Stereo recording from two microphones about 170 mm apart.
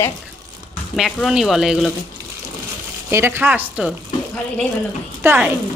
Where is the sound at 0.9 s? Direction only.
Centre (ahead or behind).